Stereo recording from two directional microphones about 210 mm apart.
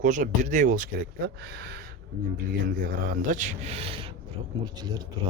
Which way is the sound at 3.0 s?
40° right (ahead or behind).